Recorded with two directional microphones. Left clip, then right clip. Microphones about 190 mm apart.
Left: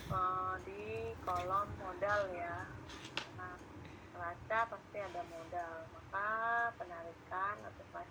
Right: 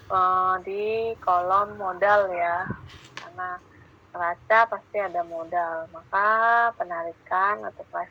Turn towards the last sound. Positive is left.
turn(degrees=-50)  # may be behind; listen again after turning